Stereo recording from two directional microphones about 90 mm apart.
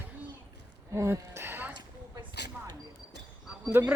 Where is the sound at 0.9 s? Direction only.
35° right (ahead or behind).